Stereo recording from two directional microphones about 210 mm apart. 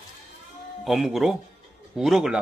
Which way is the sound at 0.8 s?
Centre (ahead or behind).